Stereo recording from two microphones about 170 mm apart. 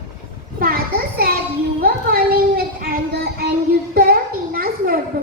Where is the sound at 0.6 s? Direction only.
60° right (ahead or behind).